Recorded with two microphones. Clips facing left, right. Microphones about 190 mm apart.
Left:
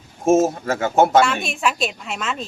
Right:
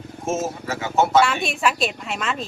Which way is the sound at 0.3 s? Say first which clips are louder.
Left 9 dB; 50° left (ahead or behind).